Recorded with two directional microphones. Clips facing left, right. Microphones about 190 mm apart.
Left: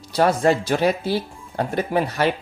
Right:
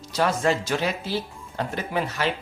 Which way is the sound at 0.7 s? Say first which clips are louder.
Left 6 dB; 55° left (ahead or behind).